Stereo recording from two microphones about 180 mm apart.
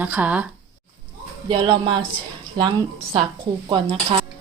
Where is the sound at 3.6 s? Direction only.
30° right (ahead or behind).